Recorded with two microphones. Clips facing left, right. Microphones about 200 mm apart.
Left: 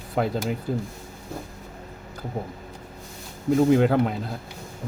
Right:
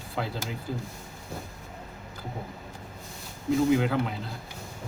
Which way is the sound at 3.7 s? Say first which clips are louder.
Left 6 dB; 50° left (ahead or behind).